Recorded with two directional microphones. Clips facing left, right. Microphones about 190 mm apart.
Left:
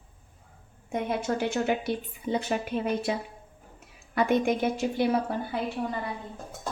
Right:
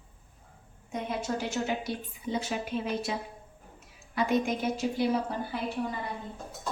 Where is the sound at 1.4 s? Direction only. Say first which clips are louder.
Left 4 dB; 55° left (ahead or behind).